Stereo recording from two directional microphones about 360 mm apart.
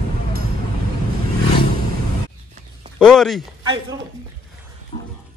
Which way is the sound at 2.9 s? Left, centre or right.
Centre.